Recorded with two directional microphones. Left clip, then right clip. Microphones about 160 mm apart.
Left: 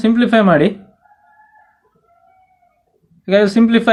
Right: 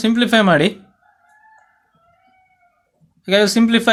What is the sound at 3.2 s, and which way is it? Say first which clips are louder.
Speech: left 2 dB; 35° right (ahead or behind).